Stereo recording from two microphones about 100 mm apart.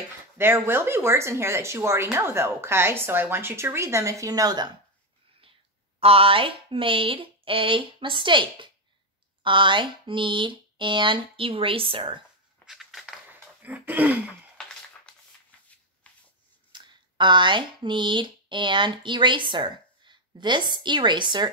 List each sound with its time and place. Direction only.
0.4 s speech: 25° right (ahead or behind); by 4.6 s 40° right (ahead or behind)
5.9 s speech: 70° right (ahead or behind)
12.6 s scissors: centre (ahead or behind)
13.3 s a sound: 15° right (ahead or behind)
16.7 s speech: 50° right (ahead or behind)